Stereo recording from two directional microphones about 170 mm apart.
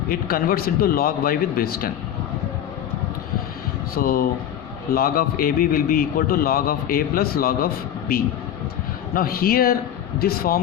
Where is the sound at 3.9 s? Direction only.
60° left (ahead or behind).